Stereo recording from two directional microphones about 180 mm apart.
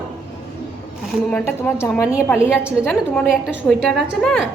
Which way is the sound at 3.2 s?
Centre (ahead or behind).